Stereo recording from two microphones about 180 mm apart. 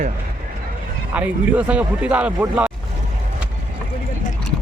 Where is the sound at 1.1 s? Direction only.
10° right (ahead or behind).